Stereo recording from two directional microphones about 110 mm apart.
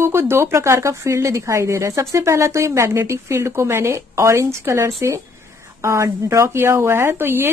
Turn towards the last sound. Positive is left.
turn(degrees=-20)  # may be behind; listen again after turning